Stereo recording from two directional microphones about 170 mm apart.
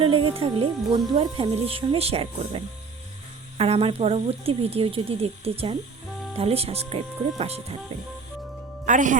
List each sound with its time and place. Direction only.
0.0 s speech: 30° right (ahead or behind)
3.6 s speech: 35° right (ahead or behind)
8.9 s speech: 50° right (ahead or behind)